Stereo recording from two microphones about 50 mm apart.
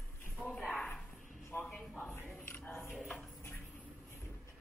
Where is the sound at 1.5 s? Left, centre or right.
Left.